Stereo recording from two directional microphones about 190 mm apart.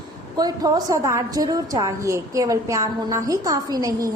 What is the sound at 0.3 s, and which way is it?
A woman's voice, 20° right (ahead or behind).